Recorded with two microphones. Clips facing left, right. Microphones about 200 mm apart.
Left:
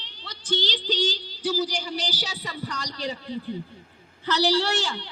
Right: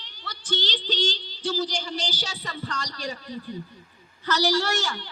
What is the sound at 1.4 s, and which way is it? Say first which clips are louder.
Speech: left 1 dB; 10° left (ahead or behind).